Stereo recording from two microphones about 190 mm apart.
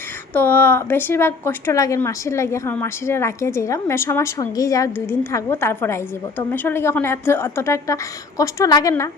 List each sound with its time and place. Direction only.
0.3 s a woman's voice: 10° left (ahead or behind)